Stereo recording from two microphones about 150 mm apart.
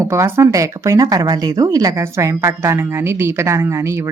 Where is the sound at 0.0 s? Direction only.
20° right (ahead or behind).